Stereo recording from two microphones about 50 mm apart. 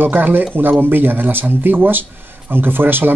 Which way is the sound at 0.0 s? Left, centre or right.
Right.